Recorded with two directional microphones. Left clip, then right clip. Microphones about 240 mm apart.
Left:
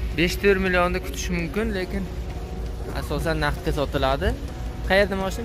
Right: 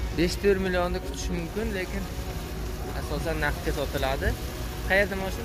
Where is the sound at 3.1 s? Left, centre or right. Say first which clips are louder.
Left 4 dB; centre.